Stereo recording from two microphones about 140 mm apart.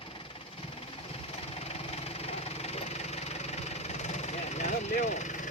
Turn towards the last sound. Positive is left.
turn(degrees=60)  # may be behind; listen again after turning